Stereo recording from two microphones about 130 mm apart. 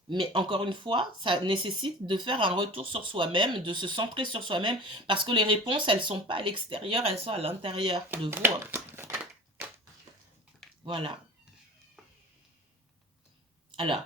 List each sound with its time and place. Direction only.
0.1 s speech: 40° right (ahead or behind)
8.3 s crumpling: 20° right (ahead or behind)
10.8 s speech: 40° right (ahead or behind)
13.7 s speech: 40° right (ahead or behind)